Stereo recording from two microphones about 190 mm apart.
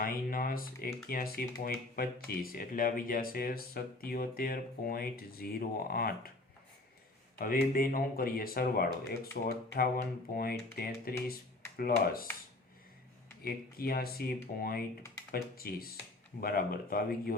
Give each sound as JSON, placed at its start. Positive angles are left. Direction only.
{"t": 0.0, "sound": "speech", "side_deg": 50}
{"t": 7.3, "sound": "speech", "side_deg": 50}
{"t": 13.4, "sound": "speech", "side_deg": 50}